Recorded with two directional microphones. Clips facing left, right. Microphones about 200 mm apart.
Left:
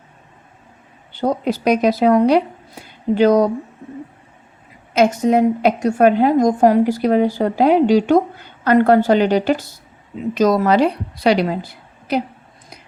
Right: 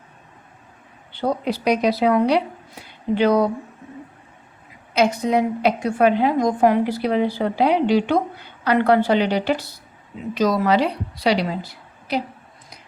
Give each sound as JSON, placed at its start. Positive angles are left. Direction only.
{"t": 1.1, "sound": "a woman's voice", "side_deg": 45}
{"t": 4.9, "sound": "a woman's voice", "side_deg": 50}